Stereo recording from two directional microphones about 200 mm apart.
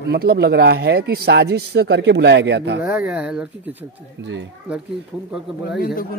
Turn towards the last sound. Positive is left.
turn(degrees=50)  # may be behind; listen again after turning